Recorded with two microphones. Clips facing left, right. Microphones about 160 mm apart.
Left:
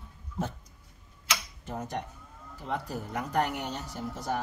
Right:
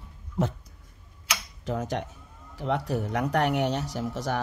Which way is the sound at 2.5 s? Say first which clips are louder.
Right 7 dB; 75° right (ahead or behind).